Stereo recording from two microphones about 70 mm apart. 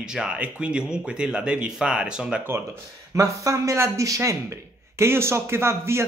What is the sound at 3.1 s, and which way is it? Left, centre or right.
Speech, right.